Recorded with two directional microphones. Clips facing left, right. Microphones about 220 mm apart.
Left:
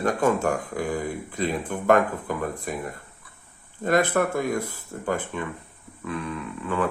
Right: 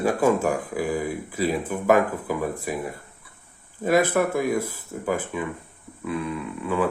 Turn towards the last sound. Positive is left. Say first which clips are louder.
# right 2 dB
turn(degrees=-10)  # may be behind; listen again after turning